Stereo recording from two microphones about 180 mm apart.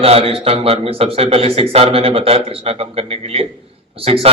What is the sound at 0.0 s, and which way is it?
A man's voice, 35° right (ahead or behind).